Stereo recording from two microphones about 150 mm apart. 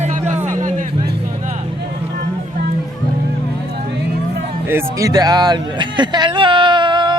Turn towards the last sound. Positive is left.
turn(degrees=-30)  # may be behind; listen again after turning